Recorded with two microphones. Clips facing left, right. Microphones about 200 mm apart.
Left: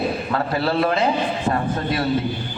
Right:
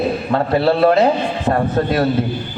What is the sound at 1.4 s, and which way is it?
Speech, 45° right (ahead or behind).